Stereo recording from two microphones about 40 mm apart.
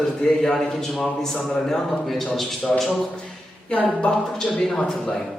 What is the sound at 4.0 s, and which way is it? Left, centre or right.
A man's voice, centre.